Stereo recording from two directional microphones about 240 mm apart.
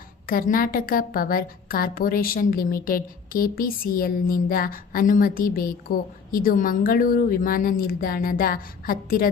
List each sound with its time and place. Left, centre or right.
0.3 s a woman's voice: left